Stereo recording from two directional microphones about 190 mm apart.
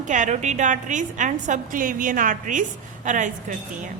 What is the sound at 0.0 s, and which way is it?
A woman's voice, 40° right (ahead or behind).